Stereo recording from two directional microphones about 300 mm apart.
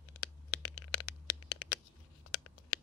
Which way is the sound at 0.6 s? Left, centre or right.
Left.